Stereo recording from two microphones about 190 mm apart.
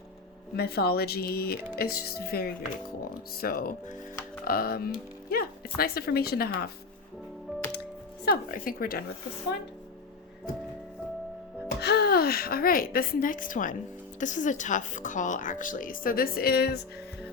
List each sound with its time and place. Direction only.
0.5 s speech: 55° left (ahead or behind)
8.2 s speech: 50° left (ahead or behind)
11.8 s a woman's voice: 60° left (ahead or behind)